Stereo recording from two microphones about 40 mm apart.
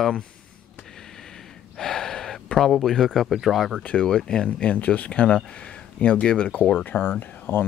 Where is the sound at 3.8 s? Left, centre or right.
Left.